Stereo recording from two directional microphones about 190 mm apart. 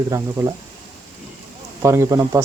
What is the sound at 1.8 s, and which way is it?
Speech, 15° right (ahead or behind).